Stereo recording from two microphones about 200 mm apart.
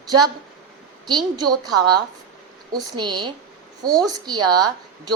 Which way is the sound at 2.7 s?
20° right (ahead or behind).